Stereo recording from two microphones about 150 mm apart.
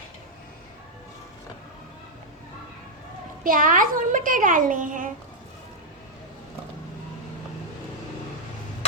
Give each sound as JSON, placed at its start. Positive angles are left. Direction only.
{"t": 3.4, "sound": "a woman's voice", "side_deg": -65}